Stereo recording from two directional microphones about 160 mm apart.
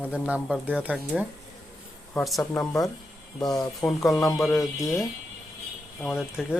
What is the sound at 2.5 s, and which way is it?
Speech, 20° left (ahead or behind).